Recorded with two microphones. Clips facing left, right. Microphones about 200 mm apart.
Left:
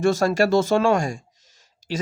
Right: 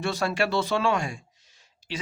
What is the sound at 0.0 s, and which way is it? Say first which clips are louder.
Speech: left 8 dB; 45° left (ahead or behind).